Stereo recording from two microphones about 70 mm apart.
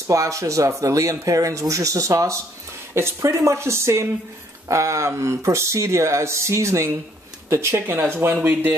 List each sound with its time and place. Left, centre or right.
0.0 s speech: right
2.9 s speech: right
8.4 s speech: right